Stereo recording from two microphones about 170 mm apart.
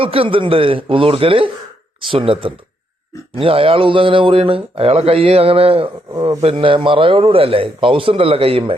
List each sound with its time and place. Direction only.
0.0 s speech: 35° right (ahead or behind)